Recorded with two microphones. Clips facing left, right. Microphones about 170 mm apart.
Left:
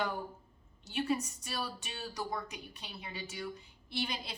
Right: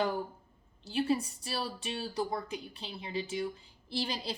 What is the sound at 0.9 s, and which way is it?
A woman's voice, 30° right (ahead or behind).